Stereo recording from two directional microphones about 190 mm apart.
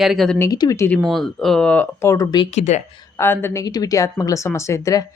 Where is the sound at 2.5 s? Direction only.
35° left (ahead or behind).